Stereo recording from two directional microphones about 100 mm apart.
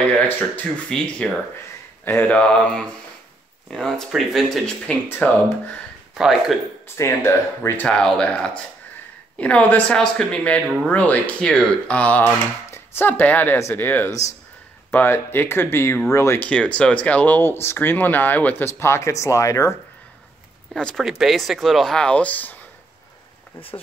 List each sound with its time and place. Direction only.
0.4 s speech: 10° left (ahead or behind)
5.0 s speech: 20° left (ahead or behind)
6.1 s speech: 5° right (ahead or behind)
7.0 s speech: 25° left (ahead or behind)
7.8 s speech: 10° left (ahead or behind); by 16.4 s 25° left (ahead or behind)
16.4 s speech: 10° left (ahead or behind); by 19.7 s 30° left (ahead or behind)
20.7 s speech: 5° left (ahead or behind)